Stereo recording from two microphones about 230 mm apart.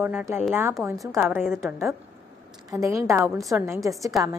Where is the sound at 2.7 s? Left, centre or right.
Centre.